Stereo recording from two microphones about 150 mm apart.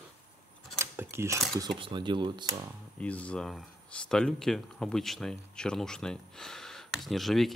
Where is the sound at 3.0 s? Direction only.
10° left (ahead or behind).